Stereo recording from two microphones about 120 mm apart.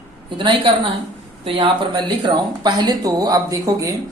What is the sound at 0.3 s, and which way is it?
A woman's voice, 40° right (ahead or behind).